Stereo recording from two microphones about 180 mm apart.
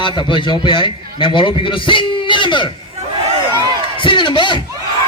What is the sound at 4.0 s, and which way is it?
Crowd, 25° left (ahead or behind).